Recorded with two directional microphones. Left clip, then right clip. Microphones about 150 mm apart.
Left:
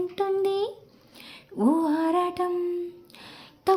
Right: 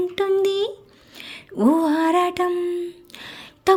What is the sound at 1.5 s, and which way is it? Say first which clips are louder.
Lullaby: right 5 dB; 20° right (ahead or behind).